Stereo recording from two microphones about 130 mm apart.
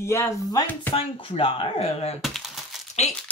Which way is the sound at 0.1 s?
25° left (ahead or behind).